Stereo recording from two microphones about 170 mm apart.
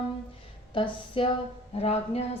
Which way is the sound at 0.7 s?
30° left (ahead or behind).